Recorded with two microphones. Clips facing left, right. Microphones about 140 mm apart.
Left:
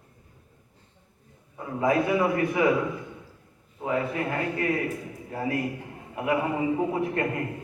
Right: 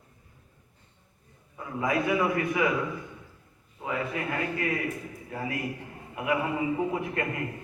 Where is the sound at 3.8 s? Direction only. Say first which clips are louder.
Left 4 dB; 35° left (ahead or behind).